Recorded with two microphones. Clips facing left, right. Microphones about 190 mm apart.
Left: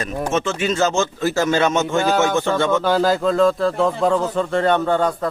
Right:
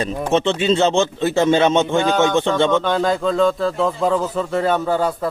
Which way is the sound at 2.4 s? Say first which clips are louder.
Right 2 dB; 25° right (ahead or behind).